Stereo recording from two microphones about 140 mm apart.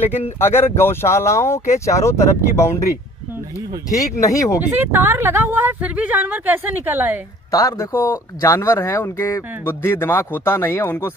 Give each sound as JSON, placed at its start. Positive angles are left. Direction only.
{"t": 0.4, "sound": "speech", "side_deg": 15}
{"t": 4.2, "sound": "speech", "side_deg": 25}
{"t": 4.6, "sound": "speech", "side_deg": -15}
{"t": 7.5, "sound": "speech", "side_deg": 20}